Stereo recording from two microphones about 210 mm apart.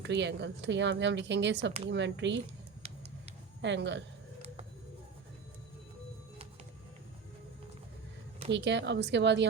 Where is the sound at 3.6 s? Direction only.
55° right (ahead or behind).